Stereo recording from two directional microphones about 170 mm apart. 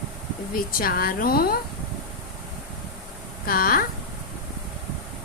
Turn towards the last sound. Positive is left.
turn(degrees=55)  # may be behind; listen again after turning